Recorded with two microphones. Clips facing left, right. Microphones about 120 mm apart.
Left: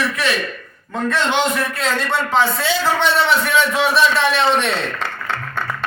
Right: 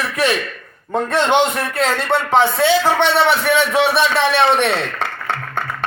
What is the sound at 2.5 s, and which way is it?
A man's voice, 65° right (ahead or behind).